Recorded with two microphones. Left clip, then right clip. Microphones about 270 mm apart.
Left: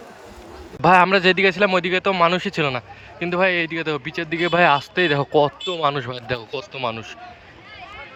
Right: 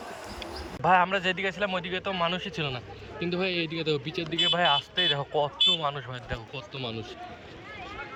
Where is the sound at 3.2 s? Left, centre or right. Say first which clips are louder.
Left 10 dB; centre.